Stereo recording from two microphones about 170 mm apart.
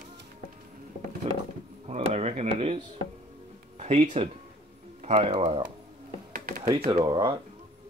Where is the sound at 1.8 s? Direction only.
40° right (ahead or behind).